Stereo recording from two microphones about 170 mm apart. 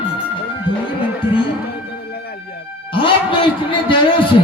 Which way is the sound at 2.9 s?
30° left (ahead or behind).